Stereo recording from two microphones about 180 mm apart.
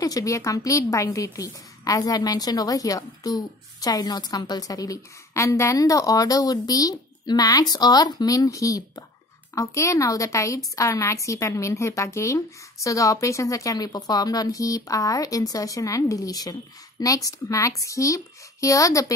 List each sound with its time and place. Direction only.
0.0 s a woman's voice: 20° left (ahead or behind)